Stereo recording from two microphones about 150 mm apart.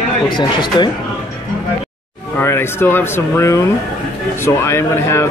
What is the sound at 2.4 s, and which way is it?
Speech, 15° left (ahead or behind).